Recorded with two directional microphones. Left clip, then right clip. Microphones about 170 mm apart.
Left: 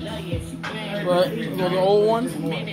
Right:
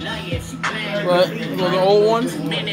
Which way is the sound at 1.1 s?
5° right (ahead or behind).